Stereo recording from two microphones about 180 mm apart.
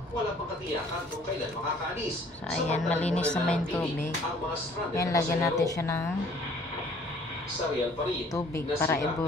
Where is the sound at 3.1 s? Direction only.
5° left (ahead or behind).